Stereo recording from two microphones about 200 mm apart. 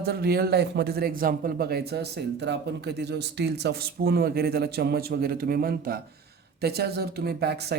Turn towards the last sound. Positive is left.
turn(degrees=-55)  # may be behind; listen again after turning